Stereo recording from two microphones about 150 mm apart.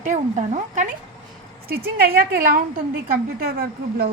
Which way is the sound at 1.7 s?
90° right.